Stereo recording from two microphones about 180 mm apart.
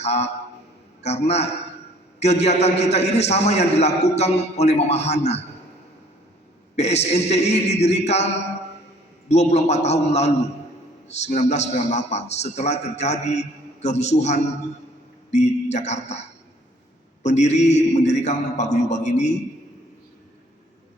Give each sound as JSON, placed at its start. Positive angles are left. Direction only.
{"t": 0.0, "sound": "a man's voice", "side_deg": 35}
{"t": 6.7, "sound": "a man's voice", "side_deg": 35}
{"t": 9.3, "sound": "a man's voice", "side_deg": 40}
{"t": 17.2, "sound": "a man's voice", "side_deg": 40}